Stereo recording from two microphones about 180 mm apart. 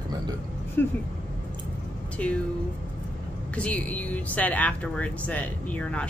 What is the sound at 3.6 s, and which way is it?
Speech, 5° left (ahead or behind).